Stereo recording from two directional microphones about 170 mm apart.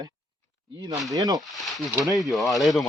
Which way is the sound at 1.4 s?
Centre (ahead or behind).